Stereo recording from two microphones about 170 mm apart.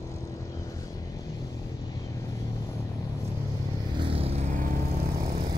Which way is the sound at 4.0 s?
35° right (ahead or behind).